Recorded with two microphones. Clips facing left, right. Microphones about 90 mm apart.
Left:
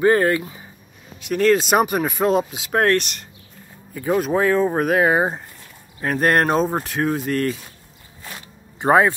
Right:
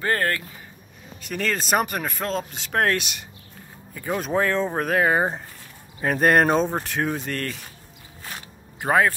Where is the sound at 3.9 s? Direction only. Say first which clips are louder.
Left 6 dB; 5° left (ahead or behind).